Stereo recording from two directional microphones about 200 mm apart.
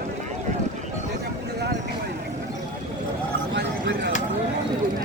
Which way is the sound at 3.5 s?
55° right (ahead or behind).